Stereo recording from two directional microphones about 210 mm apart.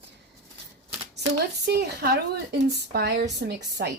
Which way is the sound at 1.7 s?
50° right (ahead or behind).